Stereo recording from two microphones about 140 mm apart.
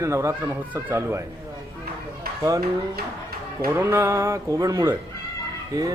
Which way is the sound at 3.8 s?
20° right (ahead or behind).